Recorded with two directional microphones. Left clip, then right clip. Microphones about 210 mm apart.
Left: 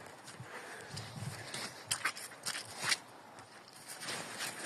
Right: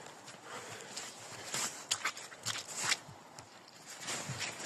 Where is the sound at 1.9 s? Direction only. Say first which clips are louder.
Left 4 dB; 10° right (ahead or behind).